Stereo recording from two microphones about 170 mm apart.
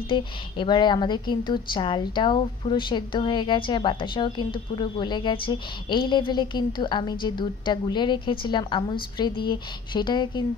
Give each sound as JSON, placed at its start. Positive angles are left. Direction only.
{"t": 0.1, "sound": "a woman's voice", "side_deg": 30}